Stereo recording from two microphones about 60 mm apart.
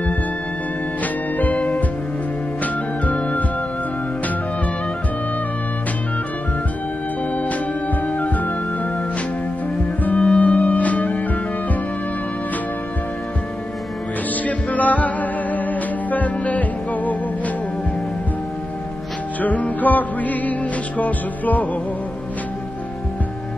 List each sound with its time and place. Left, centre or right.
1.4 s music: left
8.2 s music: left
10.0 s music: left
14.4 s music: left
19.4 s music: left